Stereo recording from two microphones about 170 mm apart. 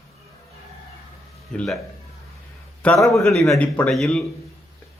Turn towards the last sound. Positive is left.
turn(degrees=0)  # may be behind; listen again after turning